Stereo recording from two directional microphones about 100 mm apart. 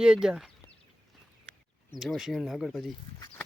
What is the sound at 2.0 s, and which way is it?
Speech, 5° right (ahead or behind).